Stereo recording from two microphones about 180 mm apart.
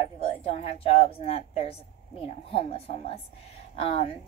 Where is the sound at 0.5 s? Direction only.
35° left (ahead or behind).